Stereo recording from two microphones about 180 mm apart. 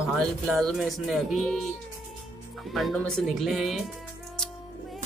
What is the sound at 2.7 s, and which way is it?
Speech, centre (ahead or behind).